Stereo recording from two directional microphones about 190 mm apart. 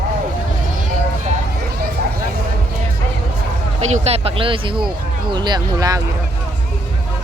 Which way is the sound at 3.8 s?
35° right (ahead or behind).